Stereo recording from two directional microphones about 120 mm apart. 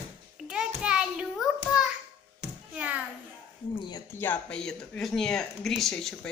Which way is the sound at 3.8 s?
35° left (ahead or behind).